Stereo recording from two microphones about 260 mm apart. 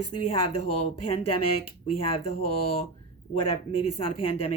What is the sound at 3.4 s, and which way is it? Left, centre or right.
A woman's voice, left.